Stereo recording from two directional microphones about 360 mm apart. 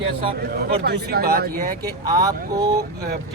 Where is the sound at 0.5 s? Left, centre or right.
Right.